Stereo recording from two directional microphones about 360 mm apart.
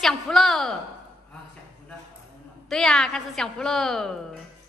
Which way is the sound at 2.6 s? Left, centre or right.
Centre.